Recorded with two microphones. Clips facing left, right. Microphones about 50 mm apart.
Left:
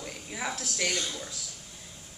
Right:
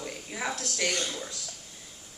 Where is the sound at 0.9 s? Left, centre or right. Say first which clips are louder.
Right 1 dB; right.